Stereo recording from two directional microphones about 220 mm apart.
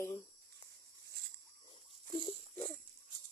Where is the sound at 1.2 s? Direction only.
45° right (ahead or behind).